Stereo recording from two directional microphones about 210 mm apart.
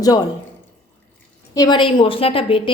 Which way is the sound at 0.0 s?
20° left (ahead or behind).